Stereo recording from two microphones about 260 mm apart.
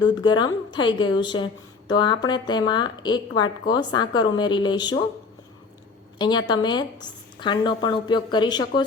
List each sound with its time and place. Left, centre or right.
0.0 s a woman's voice: centre
6.1 s a woman's voice: centre